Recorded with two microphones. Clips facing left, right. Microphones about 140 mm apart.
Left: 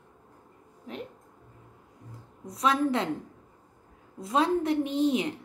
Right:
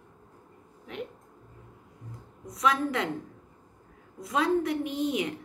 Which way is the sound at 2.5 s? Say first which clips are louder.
Left 2 dB; 30° left (ahead or behind).